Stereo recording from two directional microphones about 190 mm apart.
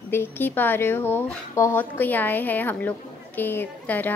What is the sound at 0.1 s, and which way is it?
A woman's voice, 10° left (ahead or behind).